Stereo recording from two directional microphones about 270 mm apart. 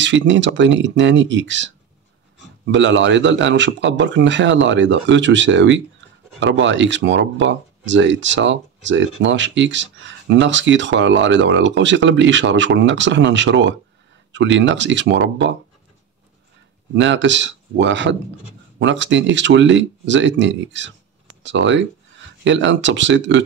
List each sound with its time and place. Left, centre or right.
0.0 s speech: right
2.7 s speech: right
16.9 s speech: right